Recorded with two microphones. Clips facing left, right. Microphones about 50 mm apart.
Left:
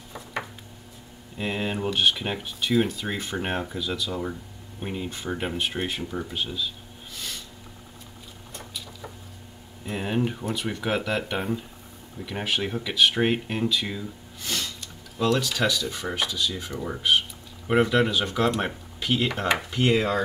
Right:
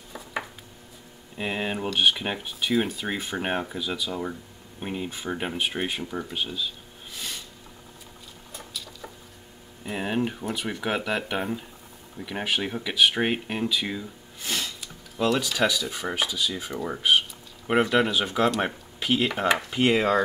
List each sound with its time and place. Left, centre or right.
0.1 s dishes: centre
1.3 s speech: centre
7.2 s snort: centre
9.8 s speech: centre
19.8 s speech: centre